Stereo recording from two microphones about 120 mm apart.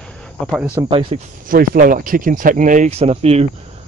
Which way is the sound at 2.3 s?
90° right.